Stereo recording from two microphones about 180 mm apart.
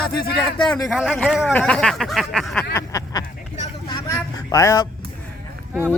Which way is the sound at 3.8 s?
20° left (ahead or behind).